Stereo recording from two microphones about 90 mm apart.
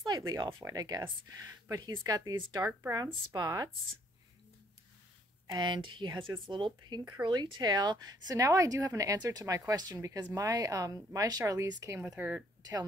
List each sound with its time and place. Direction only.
0.3 s speech: 60° right (ahead or behind)
0.7 s a woman's voice: 45° right (ahead or behind)
5.5 s a woman's voice: 60° right (ahead or behind); by 12.2 s 35° right (ahead or behind)
12.2 s speech: 25° right (ahead or behind)